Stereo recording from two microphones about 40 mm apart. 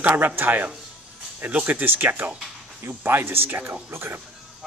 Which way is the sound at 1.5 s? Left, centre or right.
Right.